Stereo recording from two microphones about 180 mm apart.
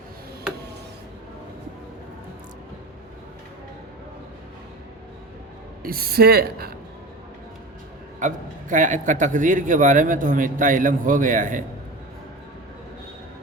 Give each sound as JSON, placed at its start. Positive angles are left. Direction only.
{"t": 5.8, "sound": "a woman's voice", "side_deg": -55}
{"t": 8.2, "sound": "speech", "side_deg": -45}